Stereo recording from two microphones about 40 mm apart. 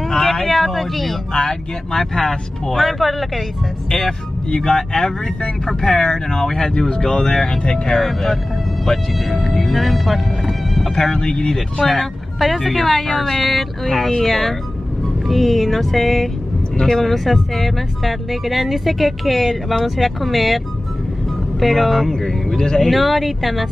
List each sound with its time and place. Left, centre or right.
0.1 s vehicle: centre
1.3 s speech: centre
1.9 s speech: centre
3.9 s speech: centre
8.0 s speech: centre
9.6 s speech: centre
11.1 s speech: centre
11.5 s speech: centre
22.8 s speech: centre